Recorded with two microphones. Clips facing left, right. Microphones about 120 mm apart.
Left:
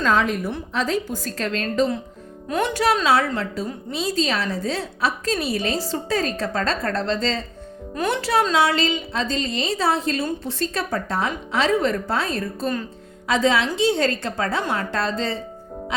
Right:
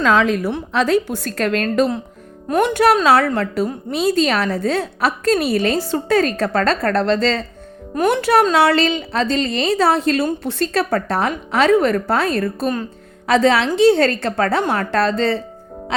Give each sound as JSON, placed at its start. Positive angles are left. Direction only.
{"t": 0.0, "sound": "a woman's voice", "side_deg": -90}
{"t": 2.5, "sound": "a woman's voice", "side_deg": -50}
{"t": 7.9, "sound": "a woman's voice", "side_deg": -50}